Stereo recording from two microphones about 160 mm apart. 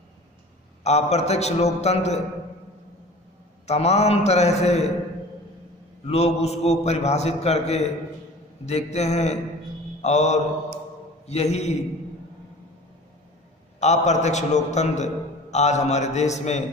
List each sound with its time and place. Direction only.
0.8 s a man's voice: 45° left (ahead or behind)
3.6 s a man's voice: 40° left (ahead or behind)
6.0 s a man's voice: 40° left (ahead or behind)
13.7 s a man's voice: 45° left (ahead or behind)